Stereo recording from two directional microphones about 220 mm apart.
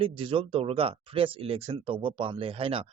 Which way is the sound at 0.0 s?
25° right (ahead or behind).